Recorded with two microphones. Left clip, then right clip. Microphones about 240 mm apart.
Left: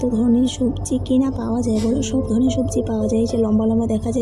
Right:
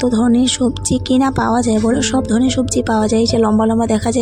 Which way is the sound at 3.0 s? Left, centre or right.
Right.